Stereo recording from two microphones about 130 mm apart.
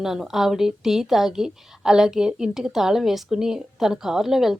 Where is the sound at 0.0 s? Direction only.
Centre (ahead or behind).